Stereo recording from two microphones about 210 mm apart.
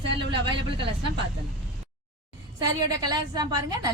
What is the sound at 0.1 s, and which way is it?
Speech, 25° right (ahead or behind).